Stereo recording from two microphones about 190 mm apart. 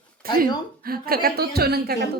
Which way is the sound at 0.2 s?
50° right (ahead or behind).